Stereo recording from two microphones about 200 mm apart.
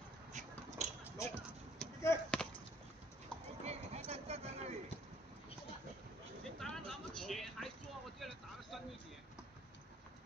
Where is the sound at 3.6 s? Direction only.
30° right (ahead or behind).